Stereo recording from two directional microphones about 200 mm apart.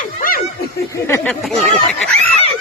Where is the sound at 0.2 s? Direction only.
45° left (ahead or behind).